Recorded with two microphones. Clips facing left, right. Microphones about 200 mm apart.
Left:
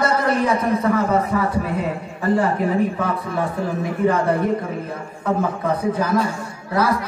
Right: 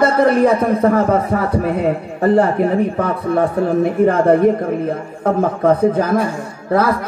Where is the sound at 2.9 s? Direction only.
55° right (ahead or behind).